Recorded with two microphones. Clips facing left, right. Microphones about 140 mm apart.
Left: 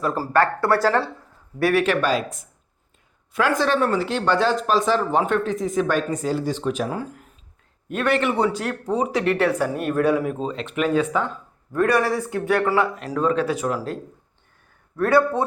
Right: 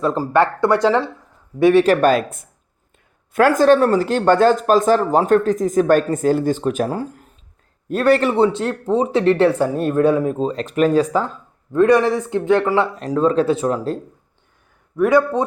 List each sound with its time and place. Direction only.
0.0 s speech: 25° right (ahead or behind)
1.8 s speech: 45° right (ahead or behind)
6.9 s a man's voice: 35° right (ahead or behind)
11.7 s speech: 20° right (ahead or behind)
14.9 s speech: 15° right (ahead or behind)